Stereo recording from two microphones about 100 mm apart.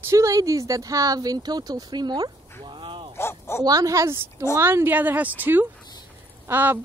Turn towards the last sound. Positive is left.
turn(degrees=-20)  # may be behind; listen again after turning